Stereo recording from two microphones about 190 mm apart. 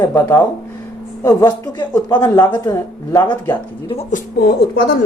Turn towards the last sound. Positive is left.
turn(degrees=60)  # may be behind; listen again after turning